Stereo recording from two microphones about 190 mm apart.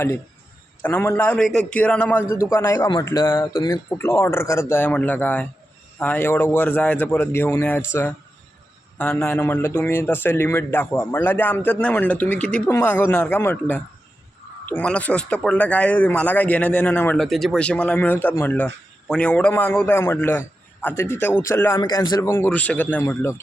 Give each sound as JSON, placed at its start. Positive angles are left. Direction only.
{"t": 0.8, "sound": "speech", "side_deg": 10}